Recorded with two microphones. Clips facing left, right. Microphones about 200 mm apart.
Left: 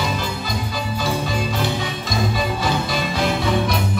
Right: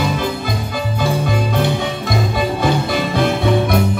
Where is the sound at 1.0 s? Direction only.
55° right (ahead or behind).